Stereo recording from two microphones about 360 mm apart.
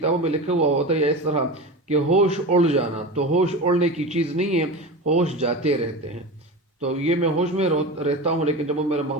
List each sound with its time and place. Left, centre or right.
0.0 s speech: centre
6.8 s speech: centre